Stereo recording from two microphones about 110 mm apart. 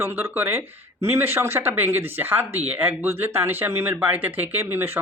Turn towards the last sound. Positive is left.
turn(degrees=-20)  # may be behind; listen again after turning